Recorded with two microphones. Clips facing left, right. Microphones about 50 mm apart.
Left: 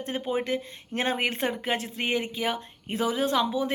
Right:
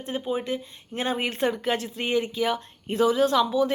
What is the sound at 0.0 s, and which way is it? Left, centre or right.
Speech, left.